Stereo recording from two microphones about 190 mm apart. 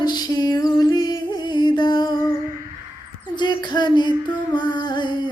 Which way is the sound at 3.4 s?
20° left (ahead or behind).